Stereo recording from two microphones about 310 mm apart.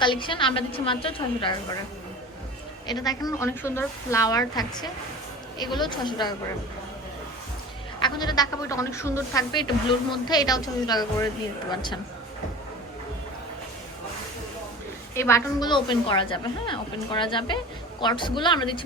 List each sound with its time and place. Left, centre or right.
0.0 s a woman's voice: centre
2.8 s a woman's voice: centre
7.9 s a woman's voice: centre
15.1 s a woman's voice: centre